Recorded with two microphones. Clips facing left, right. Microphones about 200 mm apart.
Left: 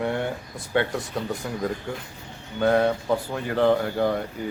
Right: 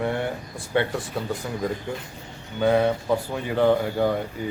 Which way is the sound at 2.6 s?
10° right (ahead or behind).